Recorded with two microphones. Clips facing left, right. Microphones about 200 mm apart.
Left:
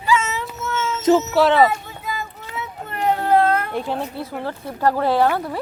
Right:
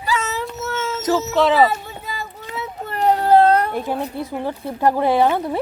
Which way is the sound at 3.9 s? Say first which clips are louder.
Right 2 dB; 15° right (ahead or behind).